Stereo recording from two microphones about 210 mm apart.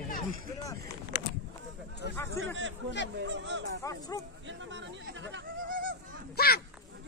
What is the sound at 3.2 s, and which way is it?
Speech, 60° right (ahead or behind).